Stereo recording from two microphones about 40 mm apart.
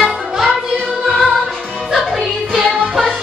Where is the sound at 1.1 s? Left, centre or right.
Centre.